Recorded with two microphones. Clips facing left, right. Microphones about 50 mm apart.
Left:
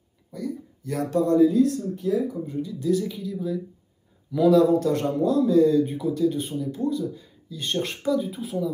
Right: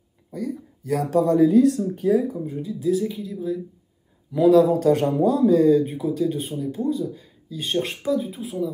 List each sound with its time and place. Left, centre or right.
0.3 s speech: right
1.4 s speech: right
2.4 s speech: centre
4.8 s speech: right
5.8 s speech: centre